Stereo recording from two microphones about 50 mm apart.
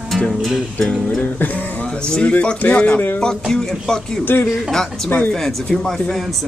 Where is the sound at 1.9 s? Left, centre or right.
Centre.